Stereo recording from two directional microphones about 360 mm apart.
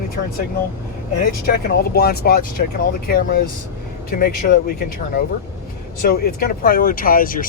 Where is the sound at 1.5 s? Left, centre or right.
Left.